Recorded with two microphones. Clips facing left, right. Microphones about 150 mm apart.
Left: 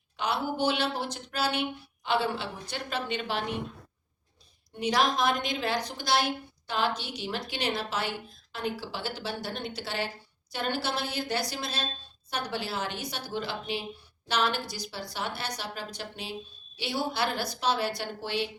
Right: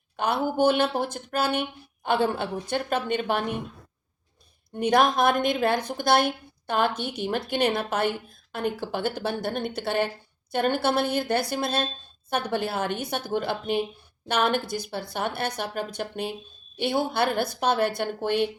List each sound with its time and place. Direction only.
0.2 s a woman's voice: 50° right (ahead or behind)
4.7 s a woman's voice: 55° right (ahead or behind)